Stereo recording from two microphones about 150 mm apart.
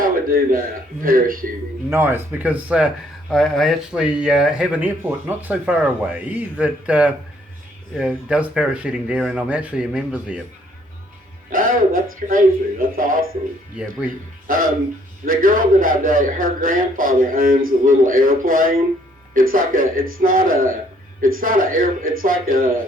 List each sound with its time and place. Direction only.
0.0 s a sound: 65° right (ahead or behind)
1.0 s a man's voice: 70° right (ahead or behind)
1.9 s speech: 15° right (ahead or behind)
11.5 s a man's voice: 65° right (ahead or behind)
14.4 s a man's voice: 65° right (ahead or behind)